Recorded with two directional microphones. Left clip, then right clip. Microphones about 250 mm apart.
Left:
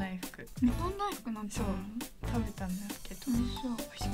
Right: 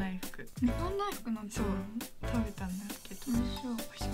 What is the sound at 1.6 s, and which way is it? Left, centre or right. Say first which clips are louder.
Speech: right 1 dB; centre.